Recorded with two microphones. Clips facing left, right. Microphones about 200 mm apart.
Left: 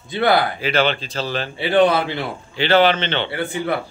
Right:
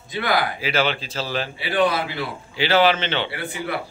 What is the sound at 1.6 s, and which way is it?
Speech, 25° left (ahead or behind).